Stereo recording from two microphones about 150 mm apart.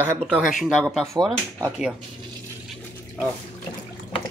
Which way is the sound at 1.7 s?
5° right (ahead or behind).